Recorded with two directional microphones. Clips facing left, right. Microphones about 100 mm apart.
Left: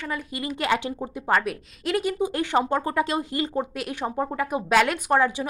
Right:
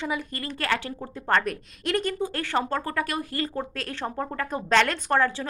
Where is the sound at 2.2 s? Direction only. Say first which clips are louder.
Left 4 dB; 15° left (ahead or behind).